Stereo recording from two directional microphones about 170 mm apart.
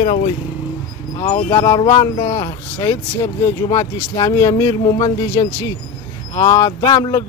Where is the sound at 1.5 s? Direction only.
25° left (ahead or behind).